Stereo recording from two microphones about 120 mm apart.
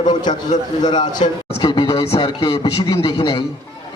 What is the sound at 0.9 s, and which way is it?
A man's voice, 40° left (ahead or behind).